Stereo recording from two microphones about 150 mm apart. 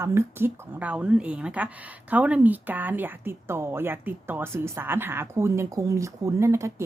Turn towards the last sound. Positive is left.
turn(degrees=-20)  # may be behind; listen again after turning